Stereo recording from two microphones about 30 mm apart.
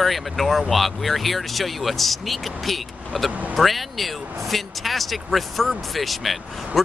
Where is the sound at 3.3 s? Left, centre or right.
Right.